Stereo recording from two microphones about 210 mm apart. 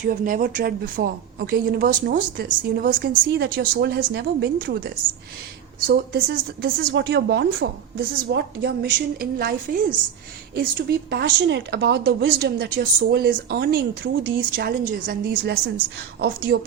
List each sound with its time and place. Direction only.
0.0 s speech: 40° right (ahead or behind)
5.8 s speech: 45° right (ahead or behind)
14.3 s speech: 45° right (ahead or behind)